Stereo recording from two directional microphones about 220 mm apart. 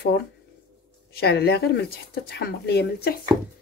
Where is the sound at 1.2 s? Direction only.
45° left (ahead or behind).